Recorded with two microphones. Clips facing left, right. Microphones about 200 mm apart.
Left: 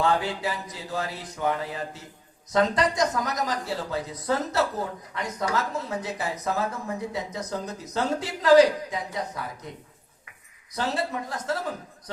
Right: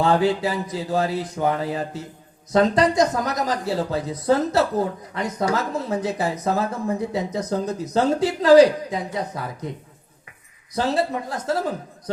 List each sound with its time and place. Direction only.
0.0 s speech: 30° right (ahead or behind)
10.8 s speech: 30° right (ahead or behind)